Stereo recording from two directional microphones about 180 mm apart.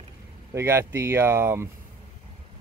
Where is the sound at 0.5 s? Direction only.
15° right (ahead or behind).